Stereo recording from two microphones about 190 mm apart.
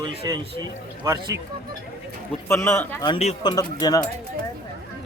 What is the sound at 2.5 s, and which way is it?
Speech, 10° left (ahead or behind).